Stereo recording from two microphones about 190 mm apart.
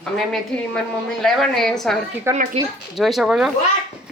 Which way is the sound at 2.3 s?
40° right (ahead or behind).